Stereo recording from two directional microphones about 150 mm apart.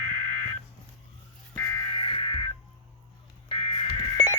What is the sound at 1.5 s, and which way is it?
Music, 20° left (ahead or behind).